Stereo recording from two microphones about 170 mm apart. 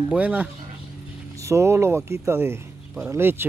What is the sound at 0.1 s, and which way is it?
Speech, 10° right (ahead or behind).